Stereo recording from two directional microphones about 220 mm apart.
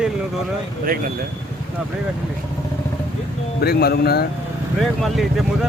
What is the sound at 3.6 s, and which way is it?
Speech, 45° left (ahead or behind).